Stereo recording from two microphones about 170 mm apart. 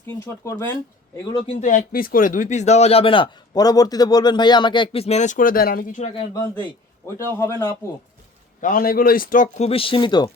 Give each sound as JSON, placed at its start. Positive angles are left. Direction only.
{"t": 0.3, "sound": "speech", "side_deg": 15}
{"t": 1.6, "sound": "speech", "side_deg": 55}
{"t": 6.3, "sound": "a man's voice", "side_deg": 20}
{"t": 8.6, "sound": "speech", "side_deg": 60}
{"t": 9.6, "sound": "speech", "side_deg": 35}